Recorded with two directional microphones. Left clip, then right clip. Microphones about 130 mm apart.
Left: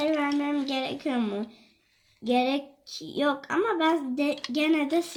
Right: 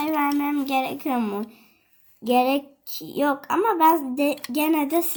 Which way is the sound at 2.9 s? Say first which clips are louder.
Right 2 dB; 65° right (ahead or behind).